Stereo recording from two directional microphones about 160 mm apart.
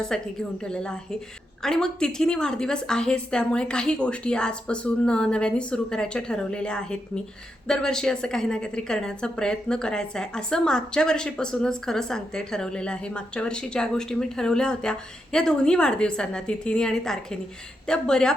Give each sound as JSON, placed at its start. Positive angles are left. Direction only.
{"t": 0.1, "sound": "a woman's voice", "side_deg": 5}